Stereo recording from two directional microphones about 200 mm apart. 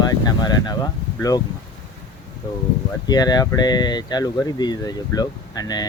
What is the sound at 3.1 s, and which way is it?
Speech, 20° left (ahead or behind).